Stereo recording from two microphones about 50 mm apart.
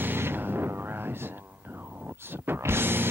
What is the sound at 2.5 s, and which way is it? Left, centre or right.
Music, right.